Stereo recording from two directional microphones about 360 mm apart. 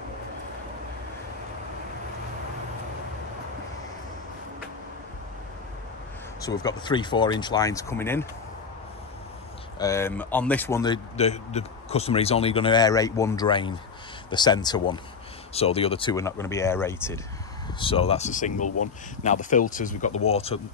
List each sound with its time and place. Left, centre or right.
6.4 s a man's voice: centre
9.8 s a man's voice: centre
18.6 s speech: left
19.2 s a man's voice: left